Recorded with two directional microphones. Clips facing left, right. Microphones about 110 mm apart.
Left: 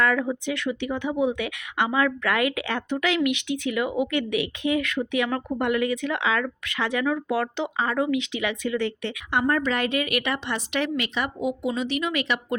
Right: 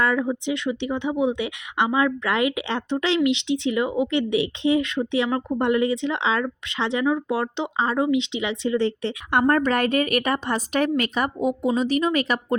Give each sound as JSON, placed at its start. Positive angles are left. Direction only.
{"t": 0.0, "sound": "speech", "side_deg": -20}
{"t": 9.3, "sound": "a woman's voice", "side_deg": -50}